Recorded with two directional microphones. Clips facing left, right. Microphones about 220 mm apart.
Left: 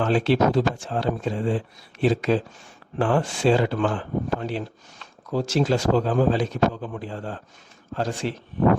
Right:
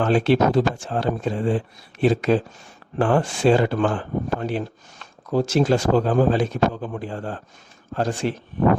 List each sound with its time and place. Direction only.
0.0 s speech: 50° right (ahead or behind)